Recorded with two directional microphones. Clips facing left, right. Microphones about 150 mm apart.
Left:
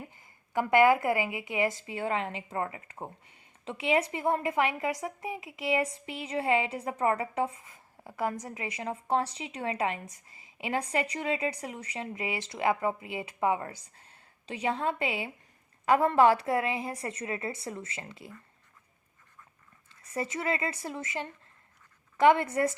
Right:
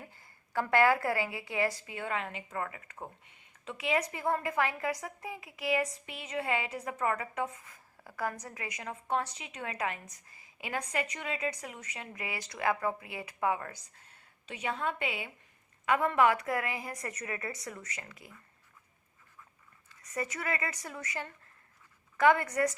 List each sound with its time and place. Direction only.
0.0 s a woman's voice: 15° left (ahead or behind)
19.9 s a woman's voice: 25° left (ahead or behind)